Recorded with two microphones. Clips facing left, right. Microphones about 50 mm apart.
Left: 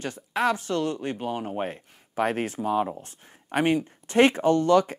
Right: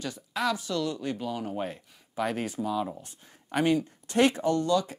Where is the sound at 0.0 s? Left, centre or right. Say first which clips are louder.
Left 4 dB; left.